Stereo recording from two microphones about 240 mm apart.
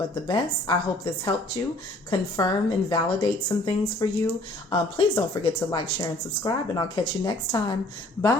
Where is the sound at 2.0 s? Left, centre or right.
Centre.